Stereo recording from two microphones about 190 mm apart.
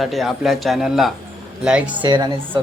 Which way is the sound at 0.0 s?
Centre (ahead or behind).